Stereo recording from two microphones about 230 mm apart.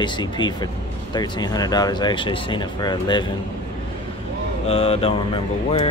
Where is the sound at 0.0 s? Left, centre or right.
Centre.